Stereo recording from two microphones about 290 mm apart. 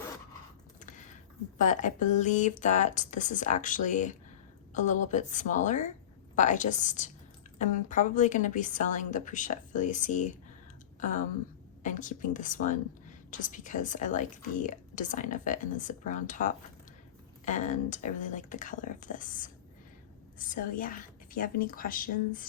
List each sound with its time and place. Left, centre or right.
0.8 s a sound: left
1.5 s a woman's voice: left
11.8 s a woman's voice: left